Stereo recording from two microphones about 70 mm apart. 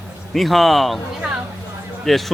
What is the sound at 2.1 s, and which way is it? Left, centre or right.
Speech, centre.